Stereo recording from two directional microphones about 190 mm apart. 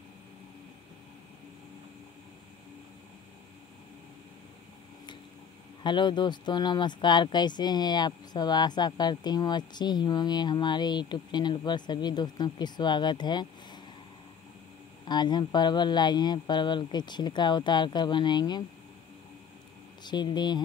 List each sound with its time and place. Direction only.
5.9 s speech: 25° left (ahead or behind)
15.0 s speech: 20° left (ahead or behind)
20.0 s speech: 25° left (ahead or behind)